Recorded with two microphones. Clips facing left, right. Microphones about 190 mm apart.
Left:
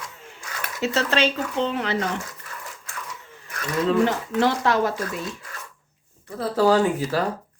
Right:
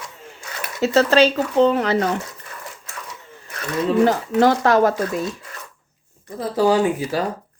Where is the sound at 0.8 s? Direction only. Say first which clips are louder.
Right 7 dB; 40° right (ahead or behind).